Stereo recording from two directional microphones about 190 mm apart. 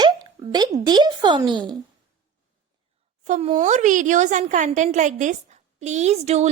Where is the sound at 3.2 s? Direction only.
35° right (ahead or behind).